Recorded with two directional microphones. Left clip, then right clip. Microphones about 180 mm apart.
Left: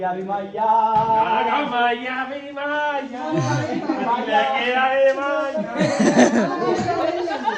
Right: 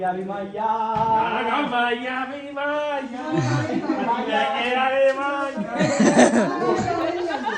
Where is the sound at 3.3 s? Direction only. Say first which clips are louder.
Left 1 dB; 10° left (ahead or behind).